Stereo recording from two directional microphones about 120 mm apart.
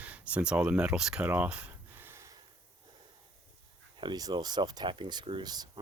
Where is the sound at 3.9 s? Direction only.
40° right (ahead or behind).